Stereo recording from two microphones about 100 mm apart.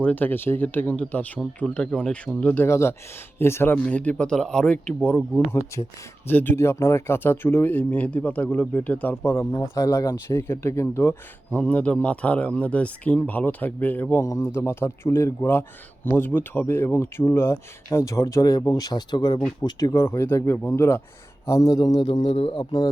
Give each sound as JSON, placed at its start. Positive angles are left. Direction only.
{"t": 0.0, "sound": "speech", "side_deg": 15}
{"t": 2.6, "sound": "speech", "side_deg": 30}
{"t": 5.5, "sound": "speech", "side_deg": 25}
{"t": 9.2, "sound": "speech", "side_deg": 25}
{"t": 11.5, "sound": "speech", "side_deg": 10}
{"t": 19.6, "sound": "a man's voice", "side_deg": 35}
{"t": 22.0, "sound": "a man's voice", "side_deg": 75}